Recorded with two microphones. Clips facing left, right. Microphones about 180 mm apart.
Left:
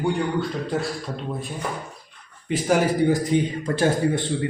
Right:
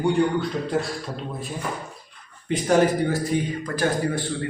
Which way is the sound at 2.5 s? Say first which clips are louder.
Right 1 dB; 10° left (ahead or behind).